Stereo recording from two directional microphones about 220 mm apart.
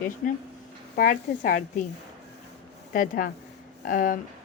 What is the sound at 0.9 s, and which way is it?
Speech, 40° left (ahead or behind).